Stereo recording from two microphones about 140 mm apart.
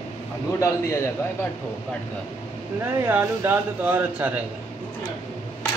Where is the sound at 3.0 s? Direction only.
15° right (ahead or behind).